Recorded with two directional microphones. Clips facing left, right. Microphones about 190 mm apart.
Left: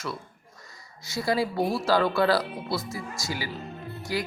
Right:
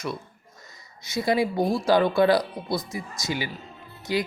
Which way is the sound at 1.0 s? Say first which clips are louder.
Right 3 dB; 20° right (ahead or behind).